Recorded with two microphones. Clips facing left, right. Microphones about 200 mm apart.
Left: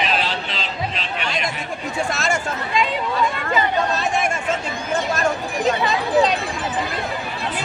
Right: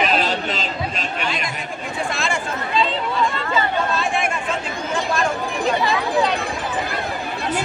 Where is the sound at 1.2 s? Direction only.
45° left (ahead or behind).